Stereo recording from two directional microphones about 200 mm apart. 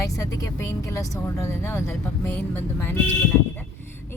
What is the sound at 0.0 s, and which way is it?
Speech, 15° left (ahead or behind).